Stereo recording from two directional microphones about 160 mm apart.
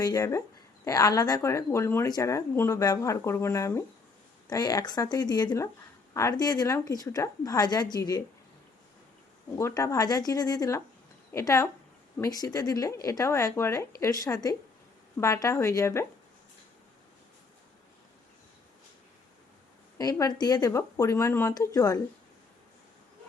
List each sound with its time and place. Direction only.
0.0 s a woman's voice: 20° left (ahead or behind)
9.6 s a woman's voice: 20° left (ahead or behind)
20.0 s a woman's voice: 25° left (ahead or behind)